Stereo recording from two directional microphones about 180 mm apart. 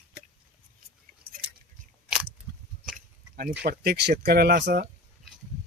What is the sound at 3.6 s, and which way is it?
Speech, 60° right (ahead or behind).